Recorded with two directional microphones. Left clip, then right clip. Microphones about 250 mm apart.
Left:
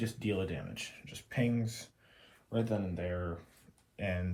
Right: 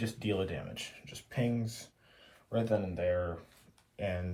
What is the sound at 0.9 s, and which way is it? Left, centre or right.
Speech, centre.